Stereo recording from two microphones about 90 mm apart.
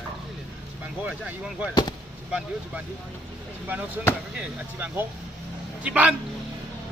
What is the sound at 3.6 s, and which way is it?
Speech, 20° right (ahead or behind).